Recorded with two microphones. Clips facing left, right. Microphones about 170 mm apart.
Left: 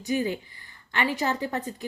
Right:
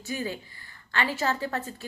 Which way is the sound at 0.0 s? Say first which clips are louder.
Left 6 dB; 20° left (ahead or behind).